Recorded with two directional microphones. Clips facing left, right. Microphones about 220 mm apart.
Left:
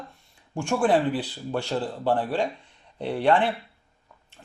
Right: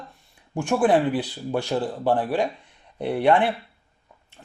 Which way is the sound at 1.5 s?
10° right (ahead or behind).